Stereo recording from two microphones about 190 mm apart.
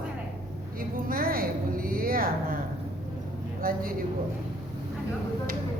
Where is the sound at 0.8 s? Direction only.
50° right (ahead or behind).